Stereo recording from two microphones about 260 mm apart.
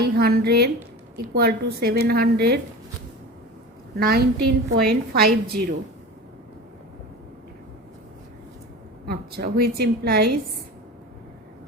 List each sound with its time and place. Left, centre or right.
0.0 s a woman's voice: right
3.9 s a woman's voice: right
9.0 s a woman's voice: right